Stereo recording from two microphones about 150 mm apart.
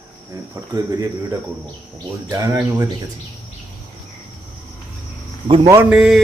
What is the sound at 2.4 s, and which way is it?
Speech, 20° right (ahead or behind).